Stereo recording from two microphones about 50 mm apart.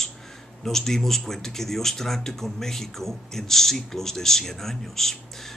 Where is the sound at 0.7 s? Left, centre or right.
Centre.